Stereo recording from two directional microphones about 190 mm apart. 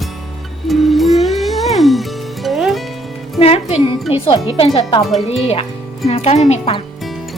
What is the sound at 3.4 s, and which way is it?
Music, 30° left (ahead or behind).